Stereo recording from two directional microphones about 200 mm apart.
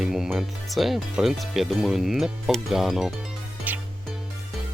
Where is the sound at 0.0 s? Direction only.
Centre (ahead or behind).